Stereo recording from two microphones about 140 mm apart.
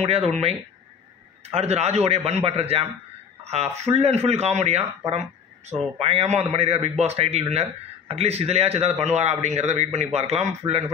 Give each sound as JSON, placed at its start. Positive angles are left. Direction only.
{"t": 0.0, "sound": "a man's voice", "side_deg": -50}
{"t": 5.9, "sound": "a man's voice", "side_deg": -50}